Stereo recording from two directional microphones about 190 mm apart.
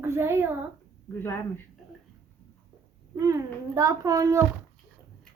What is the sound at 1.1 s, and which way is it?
Speech, 15° left (ahead or behind).